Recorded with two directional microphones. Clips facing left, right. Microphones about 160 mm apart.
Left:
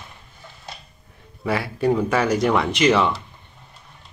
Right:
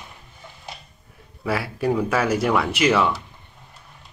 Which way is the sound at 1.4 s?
5° right (ahead or behind).